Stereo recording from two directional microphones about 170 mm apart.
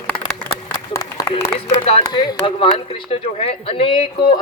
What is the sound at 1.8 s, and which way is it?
Speech, 35° left (ahead or behind).